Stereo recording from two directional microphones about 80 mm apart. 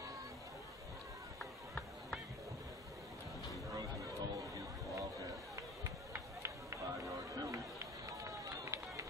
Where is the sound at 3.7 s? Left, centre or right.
Right.